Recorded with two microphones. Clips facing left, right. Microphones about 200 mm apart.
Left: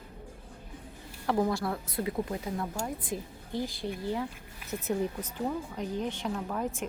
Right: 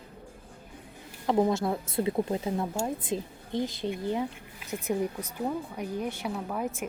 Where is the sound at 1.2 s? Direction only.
20° right (ahead or behind).